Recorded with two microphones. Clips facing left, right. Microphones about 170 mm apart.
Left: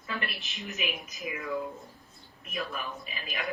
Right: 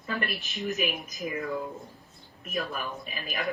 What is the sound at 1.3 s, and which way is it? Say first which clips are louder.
Speech: right 4 dB; 40° right (ahead or behind).